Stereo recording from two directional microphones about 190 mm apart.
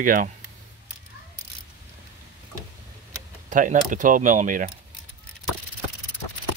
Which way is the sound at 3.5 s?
45° right (ahead or behind).